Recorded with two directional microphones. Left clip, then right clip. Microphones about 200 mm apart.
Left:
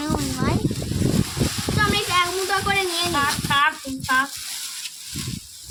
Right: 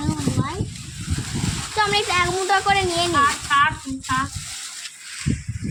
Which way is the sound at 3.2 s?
15° left (ahead or behind).